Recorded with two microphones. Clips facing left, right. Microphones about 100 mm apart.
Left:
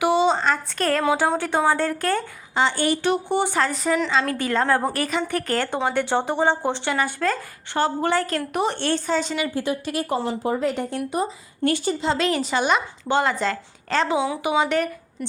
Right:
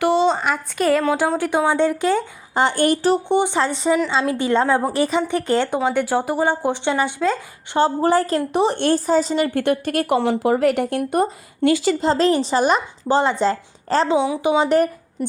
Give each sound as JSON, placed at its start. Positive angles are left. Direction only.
{"t": 0.0, "sound": "a sound", "side_deg": 5}
{"t": 0.3, "sound": "a woman's voice", "side_deg": -10}
{"t": 2.6, "sound": "a woman's voice", "side_deg": -50}
{"t": 3.2, "sound": "speech", "side_deg": -20}
{"t": 7.9, "sound": "a woman's voice", "side_deg": -35}
{"t": 8.8, "sound": "a woman's voice", "side_deg": -40}
{"t": 9.6, "sound": "speech", "side_deg": -60}
{"t": 11.6, "sound": "a woman's voice", "side_deg": -90}
{"t": 11.9, "sound": "a woman's voice", "side_deg": -40}
{"t": 14.2, "sound": "speech", "side_deg": -20}
{"t": 14.7, "sound": "speech", "side_deg": -40}